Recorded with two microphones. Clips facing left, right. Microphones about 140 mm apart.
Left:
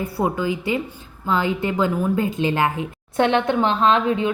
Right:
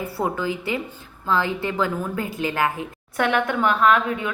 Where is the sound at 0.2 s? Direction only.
15° left (ahead or behind).